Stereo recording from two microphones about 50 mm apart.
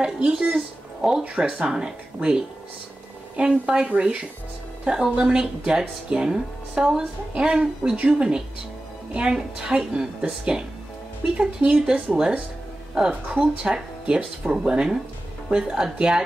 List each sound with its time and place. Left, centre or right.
0.0 s a woman's voice: right
3.3 s a woman's voice: centre